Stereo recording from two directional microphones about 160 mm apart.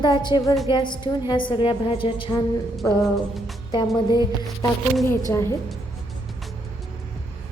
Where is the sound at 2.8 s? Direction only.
20° left (ahead or behind).